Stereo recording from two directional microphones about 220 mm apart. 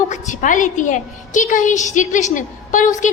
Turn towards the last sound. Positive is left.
turn(degrees=35)  # may be behind; listen again after turning